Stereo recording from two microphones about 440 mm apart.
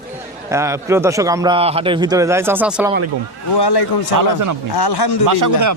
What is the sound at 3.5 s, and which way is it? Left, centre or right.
Speech, left.